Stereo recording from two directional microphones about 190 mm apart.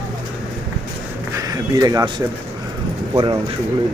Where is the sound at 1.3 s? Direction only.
20° right (ahead or behind).